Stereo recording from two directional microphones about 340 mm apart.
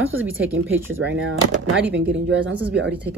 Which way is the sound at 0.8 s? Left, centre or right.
Right.